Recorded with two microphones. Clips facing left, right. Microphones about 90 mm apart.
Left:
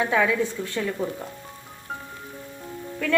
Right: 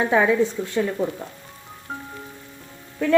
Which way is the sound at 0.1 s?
25° right (ahead or behind).